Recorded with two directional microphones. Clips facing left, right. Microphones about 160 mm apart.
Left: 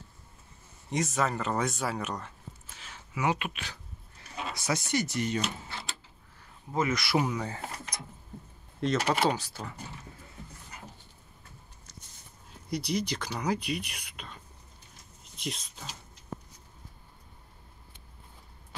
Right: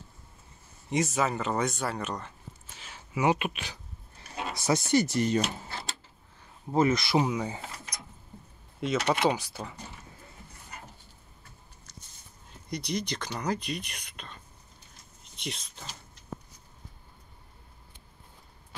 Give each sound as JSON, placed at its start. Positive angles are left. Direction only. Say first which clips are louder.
{"t": 0.8, "sound": "speech", "louder": "right 2 dB", "side_deg": -5}
{"t": 3.2, "sound": "speech", "louder": "right 4 dB", "side_deg": -20}
{"t": 6.7, "sound": "speech", "louder": "right 4 dB", "side_deg": -30}
{"t": 8.8, "sound": "speech", "louder": "left 1 dB", "side_deg": -5}
{"t": 9.3, "sound": "speech", "louder": "right 1 dB", "side_deg": -15}
{"t": 12.6, "sound": "speech", "louder": "left 2 dB", "side_deg": 5}